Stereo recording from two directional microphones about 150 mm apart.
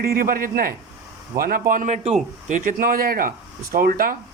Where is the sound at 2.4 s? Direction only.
60° right (ahead or behind).